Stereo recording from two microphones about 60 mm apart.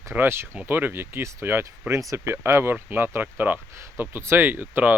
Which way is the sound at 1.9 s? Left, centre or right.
Right.